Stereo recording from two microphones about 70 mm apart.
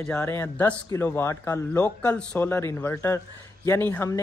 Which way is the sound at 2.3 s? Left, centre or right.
Left.